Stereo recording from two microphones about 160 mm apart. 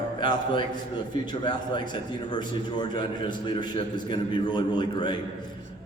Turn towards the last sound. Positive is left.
turn(degrees=30)  # may be behind; listen again after turning